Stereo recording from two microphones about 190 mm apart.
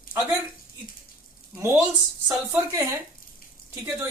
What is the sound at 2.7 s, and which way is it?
Speech, 15° right (ahead or behind).